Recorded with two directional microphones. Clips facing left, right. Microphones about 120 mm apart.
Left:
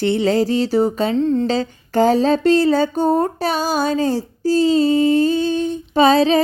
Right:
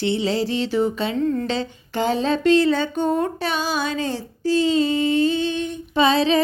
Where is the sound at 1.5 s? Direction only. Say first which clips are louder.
Left 5 dB; 40° left (ahead or behind).